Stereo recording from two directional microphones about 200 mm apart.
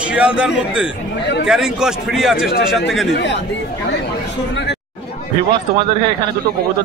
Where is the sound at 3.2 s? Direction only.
60° left (ahead or behind).